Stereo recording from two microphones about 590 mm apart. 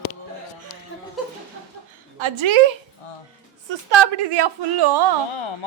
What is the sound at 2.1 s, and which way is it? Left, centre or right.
Speech, right.